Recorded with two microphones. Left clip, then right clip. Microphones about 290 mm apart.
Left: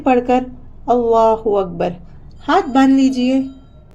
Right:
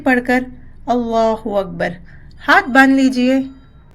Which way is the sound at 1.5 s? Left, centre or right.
Right.